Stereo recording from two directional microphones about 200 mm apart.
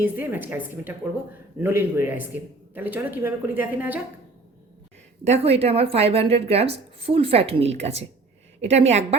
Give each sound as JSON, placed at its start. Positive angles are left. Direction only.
{"t": 0.0, "sound": "a man's voice", "side_deg": -10}
{"t": 5.2, "sound": "a woman's voice", "side_deg": -30}